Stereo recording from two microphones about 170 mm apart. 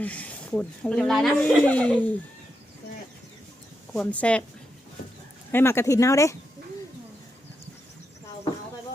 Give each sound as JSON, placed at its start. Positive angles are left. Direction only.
{"t": 0.0, "sound": "speech", "side_deg": 10}
{"t": 3.9, "sound": "speech", "side_deg": 5}
{"t": 5.5, "sound": "speech", "side_deg": 15}